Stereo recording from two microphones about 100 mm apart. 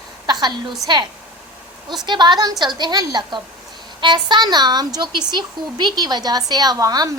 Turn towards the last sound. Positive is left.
turn(degrees=-40)  # may be behind; listen again after turning